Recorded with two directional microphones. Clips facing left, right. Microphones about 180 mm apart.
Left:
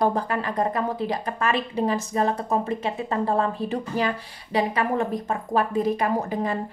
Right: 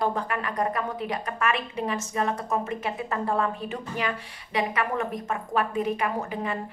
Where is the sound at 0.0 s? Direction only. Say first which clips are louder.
Left 4 dB; 35° left (ahead or behind).